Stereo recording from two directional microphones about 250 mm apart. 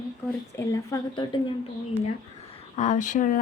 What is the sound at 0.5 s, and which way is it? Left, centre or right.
Speech, centre.